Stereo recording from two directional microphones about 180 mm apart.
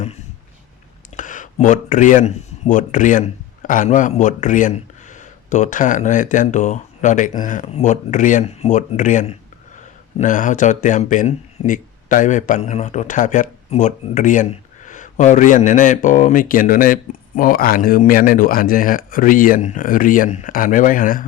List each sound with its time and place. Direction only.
1.1 s speech: 45° left (ahead or behind)